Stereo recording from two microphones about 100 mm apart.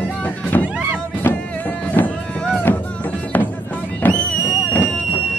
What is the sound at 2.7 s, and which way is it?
Music, 20° left (ahead or behind).